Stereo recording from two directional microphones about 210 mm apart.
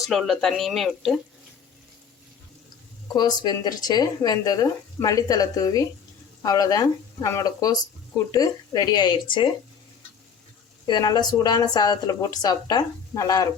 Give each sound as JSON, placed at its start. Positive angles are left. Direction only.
{"t": 0.0, "sound": "speech", "side_deg": 0}
{"t": 3.1, "sound": "speech", "side_deg": 20}
{"t": 10.8, "sound": "speech", "side_deg": 20}